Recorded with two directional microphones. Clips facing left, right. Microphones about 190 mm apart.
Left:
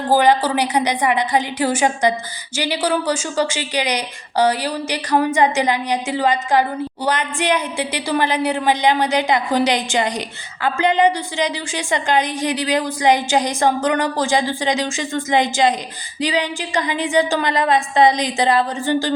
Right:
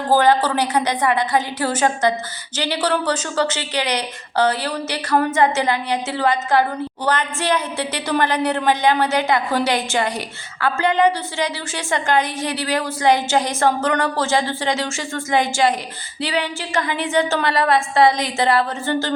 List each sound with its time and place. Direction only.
0.1 s a woman's voice: 15° left (ahead or behind)